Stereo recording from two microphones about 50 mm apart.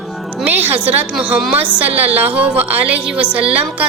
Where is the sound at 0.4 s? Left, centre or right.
Right.